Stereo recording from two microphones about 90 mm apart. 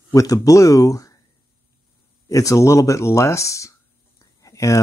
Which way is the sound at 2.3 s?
40° left (ahead or behind).